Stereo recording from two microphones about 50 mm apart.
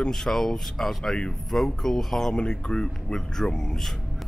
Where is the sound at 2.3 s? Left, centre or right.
Centre.